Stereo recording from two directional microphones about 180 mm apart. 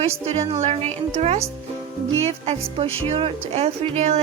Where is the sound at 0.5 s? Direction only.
35° right (ahead or behind).